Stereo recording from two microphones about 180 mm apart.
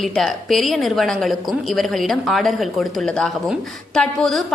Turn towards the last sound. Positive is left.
turn(degrees=5)  # may be behind; listen again after turning